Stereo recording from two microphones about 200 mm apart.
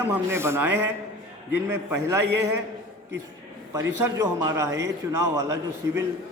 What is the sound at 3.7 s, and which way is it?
A man's voice, 15° right (ahead or behind).